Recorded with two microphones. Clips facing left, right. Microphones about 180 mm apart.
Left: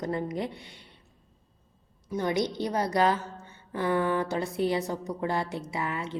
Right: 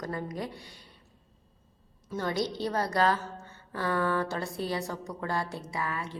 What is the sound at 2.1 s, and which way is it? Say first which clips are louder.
A woman's voice: left 3 dB; 20° left (ahead or behind).